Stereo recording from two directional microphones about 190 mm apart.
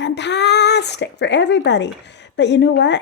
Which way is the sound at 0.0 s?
65° left (ahead or behind).